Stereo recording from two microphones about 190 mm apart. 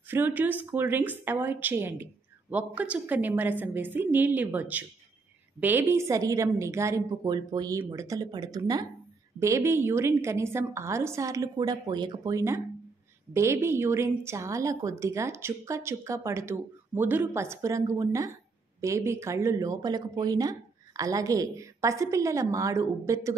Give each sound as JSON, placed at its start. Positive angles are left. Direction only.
{"t": 0.1, "sound": "a woman's voice", "side_deg": -10}